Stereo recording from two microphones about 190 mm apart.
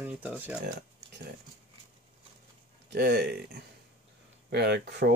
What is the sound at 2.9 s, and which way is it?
Speech, 60° right (ahead or behind).